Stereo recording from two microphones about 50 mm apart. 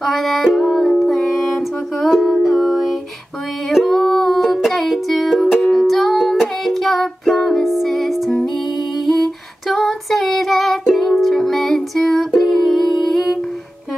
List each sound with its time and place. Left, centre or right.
0.0 s music: centre
6.6 s child singing: centre
7.3 s music: centre
9.0 s female singing: centre